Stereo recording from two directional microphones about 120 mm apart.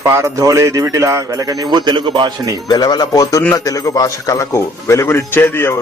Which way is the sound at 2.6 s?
35° left (ahead or behind).